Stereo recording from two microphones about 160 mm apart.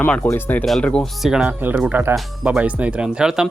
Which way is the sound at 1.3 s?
5° right (ahead or behind).